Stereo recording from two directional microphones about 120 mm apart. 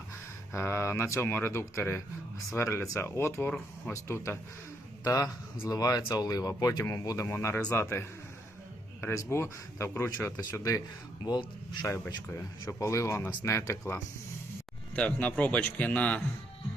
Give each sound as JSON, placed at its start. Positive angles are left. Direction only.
{"t": 0.5, "sound": "speech", "side_deg": 20}
{"t": 5.0, "sound": "speech", "side_deg": 30}
{"t": 11.9, "sound": "a man's voice", "side_deg": 25}